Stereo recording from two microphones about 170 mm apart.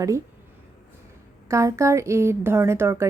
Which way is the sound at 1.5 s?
15° right (ahead or behind).